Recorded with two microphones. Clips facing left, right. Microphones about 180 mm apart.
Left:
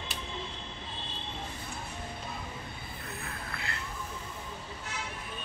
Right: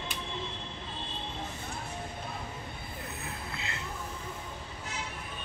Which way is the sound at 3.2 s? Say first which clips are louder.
Right 1 dB; 20° right (ahead or behind).